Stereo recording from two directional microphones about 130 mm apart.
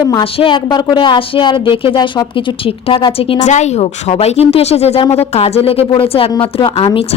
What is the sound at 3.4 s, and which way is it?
A woman's voice, 65° left (ahead or behind).